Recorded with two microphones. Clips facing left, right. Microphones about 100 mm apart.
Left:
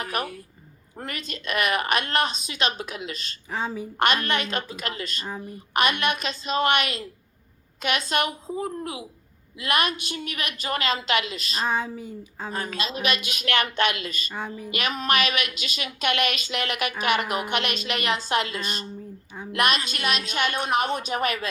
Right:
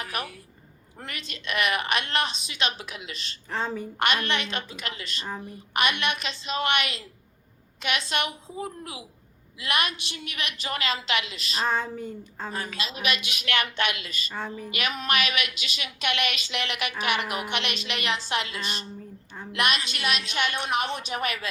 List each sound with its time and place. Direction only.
0.0 s a woman's voice: 40° left (ahead or behind)
3.5 s a woman's voice: 5° left (ahead or behind)
4.0 s a woman's voice: 40° left (ahead or behind)
11.6 s speech: 5° left (ahead or behind)
12.5 s a woman's voice: 35° left (ahead or behind)
14.3 s a woman's voice: 5° left (ahead or behind)
14.8 s a woman's voice: 35° left (ahead or behind)